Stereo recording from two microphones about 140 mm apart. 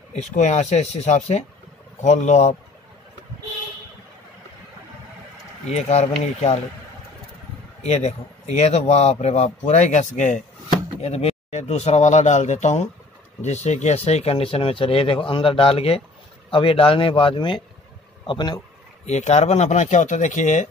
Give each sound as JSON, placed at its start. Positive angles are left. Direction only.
{"t": 0.4, "sound": "speech", "side_deg": 55}
{"t": 5.7, "sound": "a man's voice", "side_deg": 50}
{"t": 7.8, "sound": "a man's voice", "side_deg": 50}
{"t": 11.0, "sound": "a man's voice", "side_deg": 45}
{"t": 19.0, "sound": "speech", "side_deg": 55}